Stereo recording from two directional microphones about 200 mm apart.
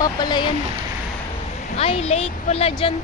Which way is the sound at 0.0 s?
20° left (ahead or behind).